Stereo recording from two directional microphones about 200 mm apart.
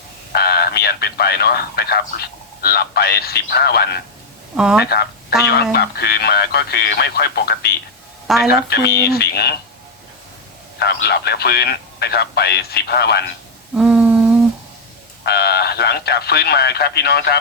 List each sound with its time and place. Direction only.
0.3 s speech: 50° left (ahead or behind)
4.5 s speech: 5° right (ahead or behind)
4.8 s speech: 55° left (ahead or behind)
10.8 s speech: 55° left (ahead or behind)
13.7 s humming: 5° right (ahead or behind)
15.2 s speech: 55° left (ahead or behind)